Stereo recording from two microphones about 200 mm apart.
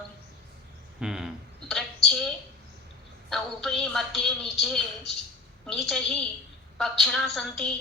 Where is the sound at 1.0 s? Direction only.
5° right (ahead or behind).